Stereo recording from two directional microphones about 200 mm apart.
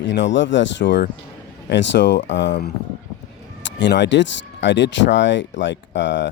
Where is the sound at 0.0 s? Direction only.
65° left (ahead or behind).